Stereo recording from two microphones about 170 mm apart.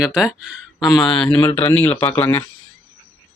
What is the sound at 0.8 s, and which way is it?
Speech, 25° left (ahead or behind).